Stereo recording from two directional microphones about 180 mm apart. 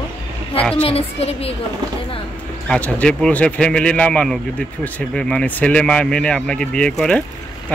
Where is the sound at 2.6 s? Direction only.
5° left (ahead or behind).